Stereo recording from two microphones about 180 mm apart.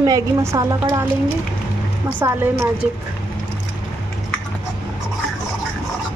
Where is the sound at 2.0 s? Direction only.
10° right (ahead or behind).